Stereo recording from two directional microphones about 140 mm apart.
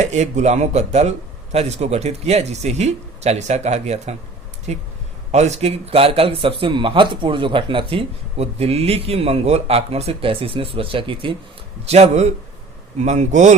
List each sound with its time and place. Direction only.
0.0 s speech: 55° right (ahead or behind); by 11.3 s 35° right (ahead or behind)
11.9 s speech: 50° right (ahead or behind)